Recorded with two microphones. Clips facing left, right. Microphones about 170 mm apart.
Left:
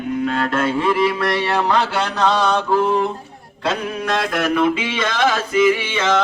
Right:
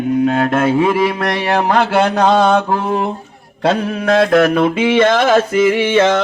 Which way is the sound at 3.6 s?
60° right (ahead or behind).